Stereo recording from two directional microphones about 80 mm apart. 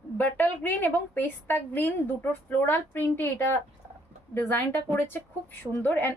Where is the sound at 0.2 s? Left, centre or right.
Left.